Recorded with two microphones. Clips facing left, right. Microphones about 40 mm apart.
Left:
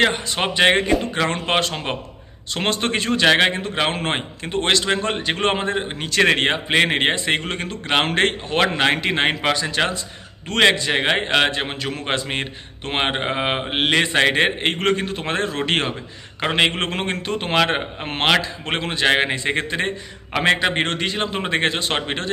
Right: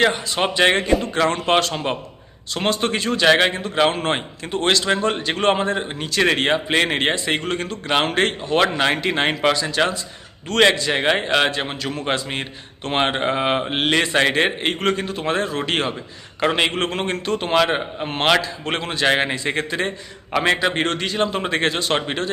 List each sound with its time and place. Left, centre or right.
0.0 s speech: left
0.3 s a man's voice: left
1.3 s a man's voice: left
2.5 s speech: left
10.5 s a man's voice: left
12.8 s a man's voice: left
16.4 s a man's voice: left
18.3 s a man's voice: left
20.6 s a man's voice: left